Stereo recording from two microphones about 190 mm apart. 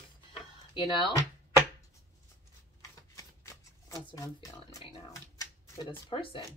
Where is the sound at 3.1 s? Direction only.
15° left (ahead or behind).